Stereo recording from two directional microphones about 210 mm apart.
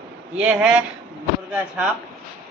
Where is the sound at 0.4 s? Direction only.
5° right (ahead or behind).